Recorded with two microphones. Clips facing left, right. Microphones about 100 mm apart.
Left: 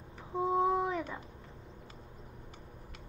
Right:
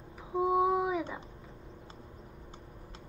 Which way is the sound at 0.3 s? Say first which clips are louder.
Right 2 dB; 5° right (ahead or behind).